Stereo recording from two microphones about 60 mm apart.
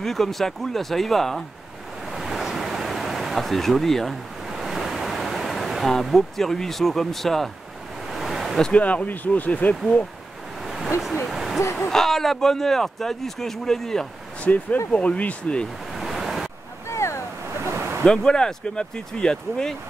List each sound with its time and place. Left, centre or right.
0.0 s speech: centre
2.1 s a sound: centre
8.7 s speech: left
10.6 s a sound: centre
11.9 s speech: centre
14.4 s speech: left
15.9 s waves: centre
16.9 s waves: left
17.6 s a sound: right
18.0 s speech: centre